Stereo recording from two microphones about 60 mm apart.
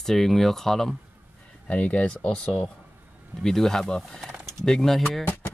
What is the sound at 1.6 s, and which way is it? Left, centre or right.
Speech, left.